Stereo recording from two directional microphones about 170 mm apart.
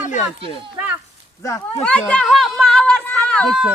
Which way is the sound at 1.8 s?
5° left (ahead or behind).